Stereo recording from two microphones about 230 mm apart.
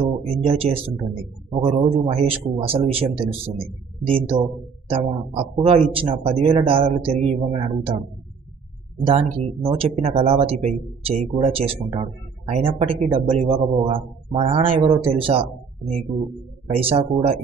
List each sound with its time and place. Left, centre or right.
0.0 s speech: right
9.4 s speech: right
16.6 s speech: right